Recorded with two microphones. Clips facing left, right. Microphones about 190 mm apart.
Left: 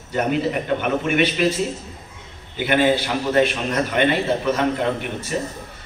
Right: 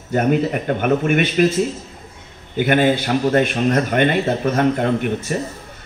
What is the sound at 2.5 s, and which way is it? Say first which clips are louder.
A man's voice: right 2 dB; 50° right (ahead or behind).